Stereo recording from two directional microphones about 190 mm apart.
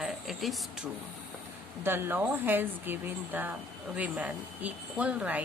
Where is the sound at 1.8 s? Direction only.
10° right (ahead or behind).